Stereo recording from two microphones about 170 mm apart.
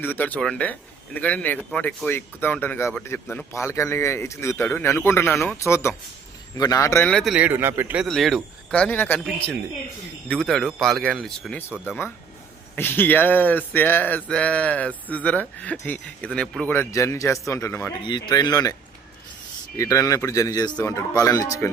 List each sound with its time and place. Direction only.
0.0 s speech: 10° left (ahead or behind)
7.3 s a man's voice: 10° right (ahead or behind)
8.0 s speech: centre (ahead or behind)
18.0 s speech: 25° left (ahead or behind)